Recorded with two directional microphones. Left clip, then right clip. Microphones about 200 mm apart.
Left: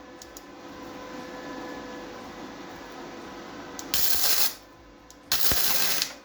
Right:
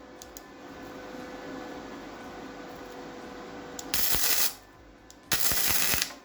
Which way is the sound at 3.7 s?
10° right (ahead or behind).